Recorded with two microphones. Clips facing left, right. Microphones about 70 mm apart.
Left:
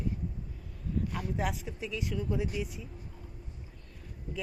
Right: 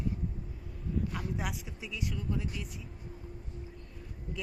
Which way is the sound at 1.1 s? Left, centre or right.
Centre.